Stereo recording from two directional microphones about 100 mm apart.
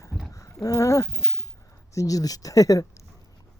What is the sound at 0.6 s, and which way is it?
Dog, 35° left (ahead or behind).